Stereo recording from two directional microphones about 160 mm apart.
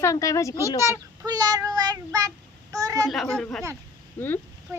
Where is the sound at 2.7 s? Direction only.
20° right (ahead or behind).